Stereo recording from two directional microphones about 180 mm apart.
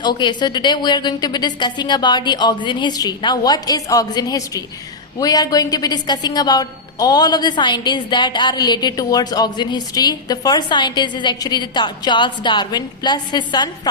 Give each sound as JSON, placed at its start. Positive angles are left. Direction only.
{"t": 0.0, "sound": "a woman's voice", "side_deg": 25}